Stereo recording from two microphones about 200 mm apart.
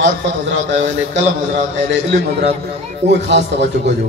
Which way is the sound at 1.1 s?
65° right (ahead or behind).